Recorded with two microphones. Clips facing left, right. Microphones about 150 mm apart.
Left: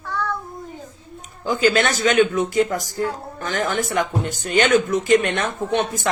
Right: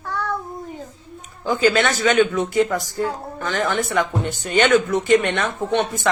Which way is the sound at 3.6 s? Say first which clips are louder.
Right 1 dB; 45° left (ahead or behind).